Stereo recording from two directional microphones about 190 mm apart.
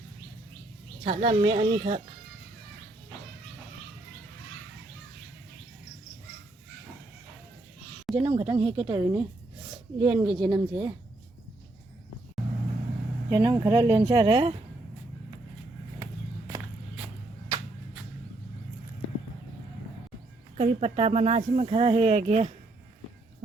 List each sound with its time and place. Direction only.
1.0 s speech: 30° right (ahead or behind)
8.1 s speech: 30° right (ahead or behind)
13.3 s speech: 20° right (ahead or behind)
20.6 s speech: 35° right (ahead or behind)